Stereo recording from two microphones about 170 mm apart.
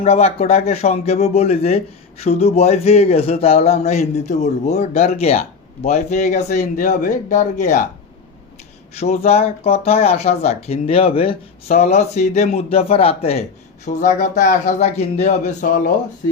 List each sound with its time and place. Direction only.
0.0 s speech: 35° left (ahead or behind)
9.0 s speech: 40° left (ahead or behind)